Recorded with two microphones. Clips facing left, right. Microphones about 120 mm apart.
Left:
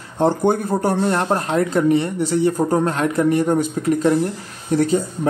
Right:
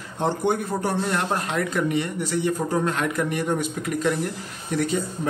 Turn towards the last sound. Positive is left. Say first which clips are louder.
# left 7 dB
turn(degrees=35)  # may be behind; listen again after turning